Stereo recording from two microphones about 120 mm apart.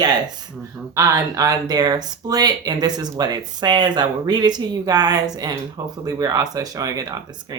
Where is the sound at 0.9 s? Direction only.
30° right (ahead or behind).